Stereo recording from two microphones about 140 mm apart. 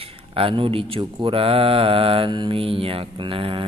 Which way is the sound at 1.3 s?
40° right (ahead or behind).